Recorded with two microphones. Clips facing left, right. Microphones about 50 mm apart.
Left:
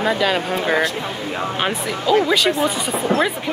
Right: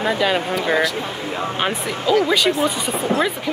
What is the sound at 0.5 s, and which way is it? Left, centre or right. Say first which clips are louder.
Speech: even; left.